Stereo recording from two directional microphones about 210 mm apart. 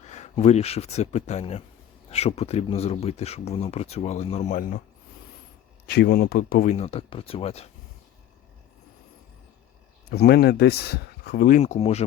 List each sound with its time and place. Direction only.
0.0 s speech: 35° left (ahead or behind)
5.9 s speech: 50° left (ahead or behind)
6.7 s speech: 30° left (ahead or behind)
10.1 s speech: 50° left (ahead or behind); by 12.0 s 30° left (ahead or behind)